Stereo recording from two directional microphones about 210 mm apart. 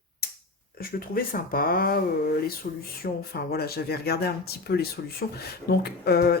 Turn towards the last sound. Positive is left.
turn(degrees=50)  # may be behind; listen again after turning